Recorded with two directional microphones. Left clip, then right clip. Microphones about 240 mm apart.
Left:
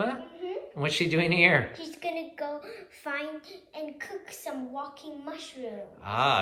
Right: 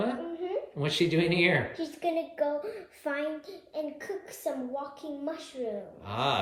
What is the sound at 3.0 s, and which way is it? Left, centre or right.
A woman's voice, right.